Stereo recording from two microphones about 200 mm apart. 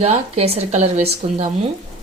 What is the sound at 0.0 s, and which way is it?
Speech, 30° right (ahead or behind).